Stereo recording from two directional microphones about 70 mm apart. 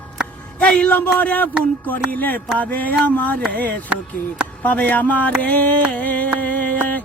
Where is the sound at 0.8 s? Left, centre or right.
Left.